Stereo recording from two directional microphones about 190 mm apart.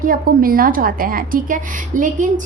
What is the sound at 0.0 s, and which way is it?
A woman's voice, 45° right (ahead or behind).